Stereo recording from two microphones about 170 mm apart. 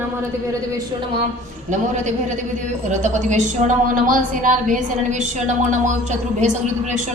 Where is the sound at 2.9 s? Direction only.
45° right (ahead or behind).